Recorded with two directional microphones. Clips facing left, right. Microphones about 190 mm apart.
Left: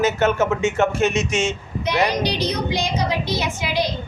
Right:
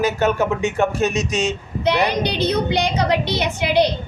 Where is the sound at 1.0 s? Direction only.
35° right (ahead or behind).